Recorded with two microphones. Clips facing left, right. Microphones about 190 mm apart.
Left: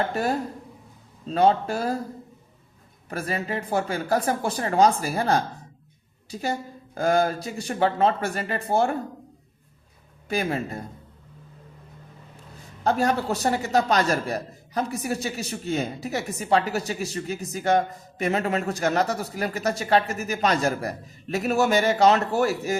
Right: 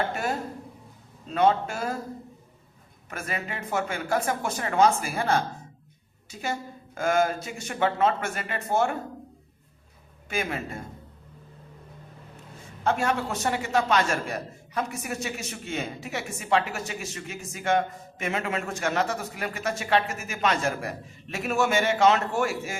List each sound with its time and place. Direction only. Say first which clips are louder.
0.1 s a man's voice: left 4 dB; 35° left (ahead or behind)
3.1 s a man's voice: left 5 dB; 35° left (ahead or behind)
10.2 s a man's voice: left 4 dB; 35° left (ahead or behind)
12.8 s a man's voice: left 3 dB; 35° left (ahead or behind)